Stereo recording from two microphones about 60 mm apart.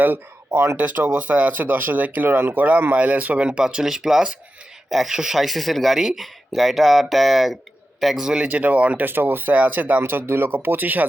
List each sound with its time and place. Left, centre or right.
0.0 s speech: right
0.8 s speech: right
2.6 s a man's voice: right
8.4 s speech: right
9.0 s speech: right